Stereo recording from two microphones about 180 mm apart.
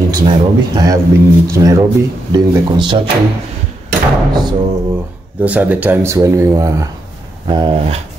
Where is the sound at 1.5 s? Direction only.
20° right (ahead or behind).